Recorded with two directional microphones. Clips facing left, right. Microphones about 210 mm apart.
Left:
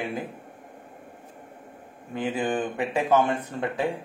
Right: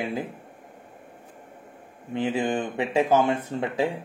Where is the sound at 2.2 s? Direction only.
25° right (ahead or behind).